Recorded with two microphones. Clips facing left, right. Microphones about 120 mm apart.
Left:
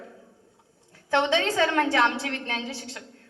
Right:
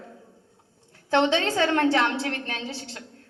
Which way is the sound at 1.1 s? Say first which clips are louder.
Right 1 dB; 30° right (ahead or behind).